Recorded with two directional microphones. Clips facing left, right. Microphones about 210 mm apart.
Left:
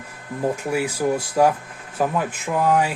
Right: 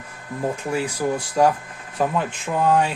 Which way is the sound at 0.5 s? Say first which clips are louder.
Left 1 dB; 10° left (ahead or behind).